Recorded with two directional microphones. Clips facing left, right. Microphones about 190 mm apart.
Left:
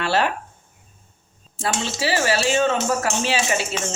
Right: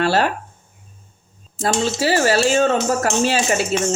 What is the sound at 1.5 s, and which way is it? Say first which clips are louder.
Speech: right 6 dB; 40° right (ahead or behind).